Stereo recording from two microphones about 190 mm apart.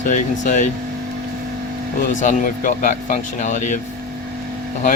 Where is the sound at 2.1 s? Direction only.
45° left (ahead or behind).